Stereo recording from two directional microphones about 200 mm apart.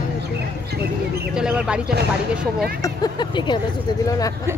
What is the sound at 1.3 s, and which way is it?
Speech, 5° right (ahead or behind).